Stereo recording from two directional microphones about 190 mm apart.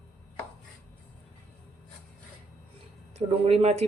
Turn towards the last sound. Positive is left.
turn(degrees=-35)  # may be behind; listen again after turning